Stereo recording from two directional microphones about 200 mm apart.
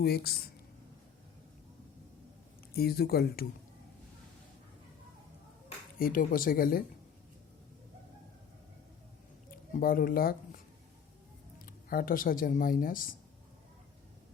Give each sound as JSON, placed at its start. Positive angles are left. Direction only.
{"t": 0.0, "sound": "speech", "side_deg": 50}
{"t": 2.7, "sound": "speech", "side_deg": 50}
{"t": 6.0, "sound": "speech", "side_deg": 45}
{"t": 9.5, "sound": "speech", "side_deg": 45}
{"t": 11.6, "sound": "speech", "side_deg": 45}